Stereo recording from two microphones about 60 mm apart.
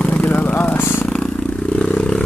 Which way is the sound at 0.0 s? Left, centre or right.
Left.